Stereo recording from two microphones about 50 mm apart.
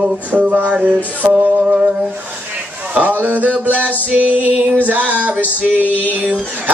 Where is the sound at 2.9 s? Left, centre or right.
Right.